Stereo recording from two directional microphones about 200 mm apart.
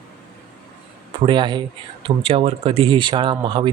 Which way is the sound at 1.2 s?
25° right (ahead or behind).